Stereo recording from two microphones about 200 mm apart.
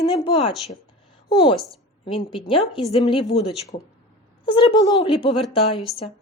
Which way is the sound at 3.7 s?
40° left (ahead or behind).